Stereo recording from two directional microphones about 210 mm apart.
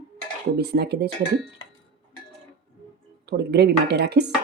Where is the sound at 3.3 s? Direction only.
50° right (ahead or behind).